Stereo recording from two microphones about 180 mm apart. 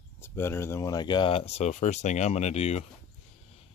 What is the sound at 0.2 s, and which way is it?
Speech, 15° left (ahead or behind).